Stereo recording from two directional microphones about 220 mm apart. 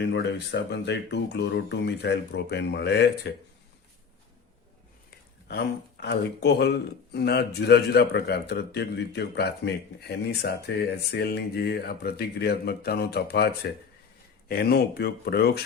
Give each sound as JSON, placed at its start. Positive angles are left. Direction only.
{"t": 0.0, "sound": "speech", "side_deg": 50}
{"t": 5.5, "sound": "speech", "side_deg": 50}